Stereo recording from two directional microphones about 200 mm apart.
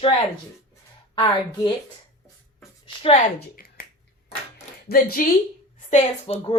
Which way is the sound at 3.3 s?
45° left (ahead or behind).